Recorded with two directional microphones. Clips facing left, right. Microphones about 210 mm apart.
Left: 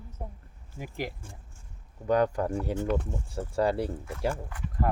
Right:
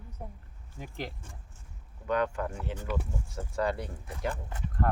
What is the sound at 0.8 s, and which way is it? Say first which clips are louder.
Speech: left 4 dB; 5° left (ahead or behind).